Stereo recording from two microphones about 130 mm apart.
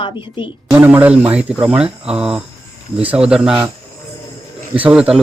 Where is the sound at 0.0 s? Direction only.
40° left (ahead or behind).